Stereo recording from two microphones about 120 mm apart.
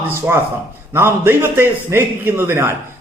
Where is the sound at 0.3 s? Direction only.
20° right (ahead or behind).